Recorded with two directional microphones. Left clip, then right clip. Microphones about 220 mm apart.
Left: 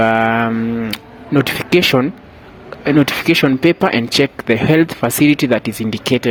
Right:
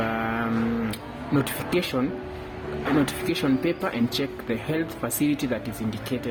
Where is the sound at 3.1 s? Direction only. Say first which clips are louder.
Left 12 dB; 40° left (ahead or behind).